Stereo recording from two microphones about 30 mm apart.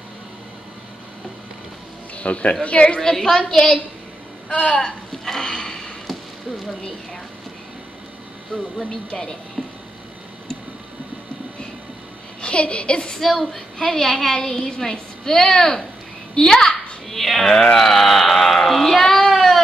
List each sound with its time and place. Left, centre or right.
2.1 s speech: left
3.0 s a woman's voice: centre
4.5 s speech: left
4.8 s a sound: centre
12.4 s a woman's voice: left
13.2 s a woman's voice: centre; by 16.6 s left
16.6 s a child's voice: centre
17.7 s a sound: centre